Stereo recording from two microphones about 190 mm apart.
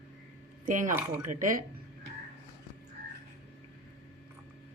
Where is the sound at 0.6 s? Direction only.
45° right (ahead or behind).